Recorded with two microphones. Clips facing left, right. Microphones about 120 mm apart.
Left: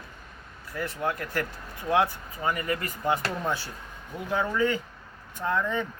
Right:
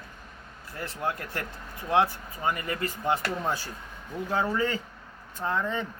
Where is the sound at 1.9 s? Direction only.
25° right (ahead or behind).